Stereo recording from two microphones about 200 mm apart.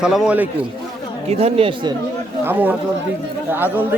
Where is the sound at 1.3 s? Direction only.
30° right (ahead or behind).